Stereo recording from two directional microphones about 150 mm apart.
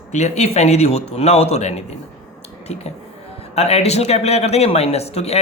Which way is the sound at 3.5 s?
45° left (ahead or behind).